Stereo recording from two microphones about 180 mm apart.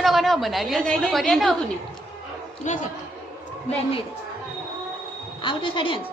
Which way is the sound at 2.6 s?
40° left (ahead or behind).